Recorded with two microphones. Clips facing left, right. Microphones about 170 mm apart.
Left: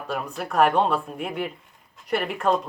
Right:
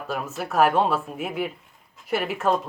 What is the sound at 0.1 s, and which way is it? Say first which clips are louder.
Speech: even; centre (ahead or behind).